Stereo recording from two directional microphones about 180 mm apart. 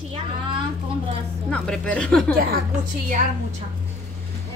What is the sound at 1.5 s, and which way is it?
Speech, 5° left (ahead or behind).